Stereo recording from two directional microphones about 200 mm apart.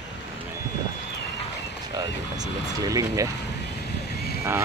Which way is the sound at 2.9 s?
15° right (ahead or behind).